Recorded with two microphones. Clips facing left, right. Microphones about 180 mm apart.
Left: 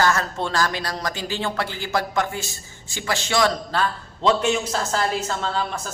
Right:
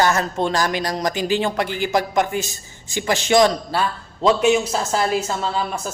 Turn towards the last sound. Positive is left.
turn(degrees=-10)  # may be behind; listen again after turning